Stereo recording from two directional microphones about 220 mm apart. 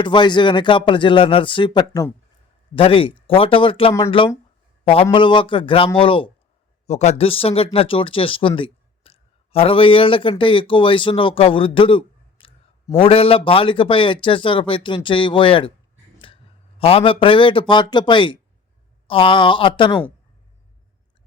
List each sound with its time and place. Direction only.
0.0 s a man's voice: 20° left (ahead or behind)